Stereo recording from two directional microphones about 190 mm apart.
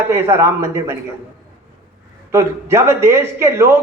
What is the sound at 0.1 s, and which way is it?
Speech, 15° right (ahead or behind).